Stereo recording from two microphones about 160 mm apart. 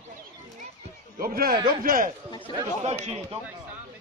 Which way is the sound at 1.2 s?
70° right (ahead or behind).